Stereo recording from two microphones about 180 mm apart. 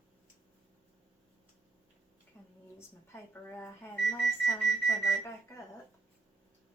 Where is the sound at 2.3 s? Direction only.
15° left (ahead or behind).